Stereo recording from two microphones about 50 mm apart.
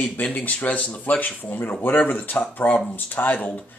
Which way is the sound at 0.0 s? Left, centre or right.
Left.